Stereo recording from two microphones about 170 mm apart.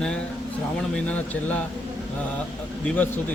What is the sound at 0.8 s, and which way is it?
Speech, 5° left (ahead or behind).